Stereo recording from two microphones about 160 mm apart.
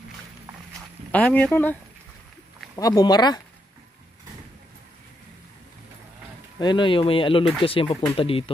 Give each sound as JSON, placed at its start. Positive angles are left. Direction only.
{"t": 1.1, "sound": "speech", "side_deg": 10}
{"t": 2.7, "sound": "speech", "side_deg": 25}
{"t": 6.6, "sound": "speech", "side_deg": 30}